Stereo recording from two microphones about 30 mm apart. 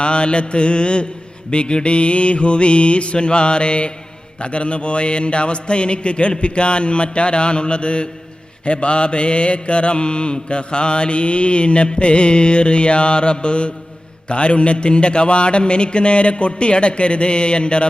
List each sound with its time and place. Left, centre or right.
0.0 s a man's voice: left